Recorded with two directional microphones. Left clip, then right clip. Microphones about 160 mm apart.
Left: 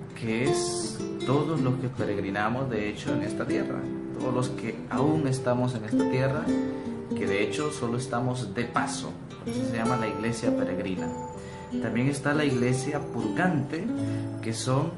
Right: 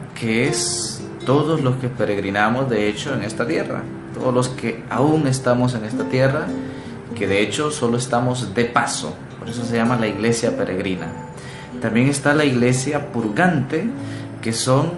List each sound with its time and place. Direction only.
0.3 s speech: 5° right (ahead or behind)
4.9 s speech: 5° right (ahead or behind)